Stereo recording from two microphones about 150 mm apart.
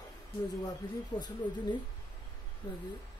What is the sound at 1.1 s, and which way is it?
Speech, 25° left (ahead or behind).